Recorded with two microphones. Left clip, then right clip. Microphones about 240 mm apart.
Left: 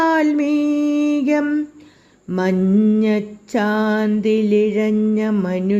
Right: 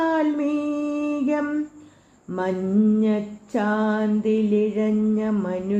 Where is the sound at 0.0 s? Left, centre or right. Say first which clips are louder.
Left 5 dB; left.